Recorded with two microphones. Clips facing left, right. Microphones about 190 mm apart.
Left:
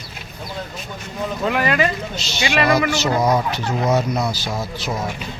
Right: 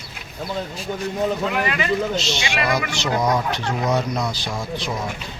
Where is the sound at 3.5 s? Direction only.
5° left (ahead or behind).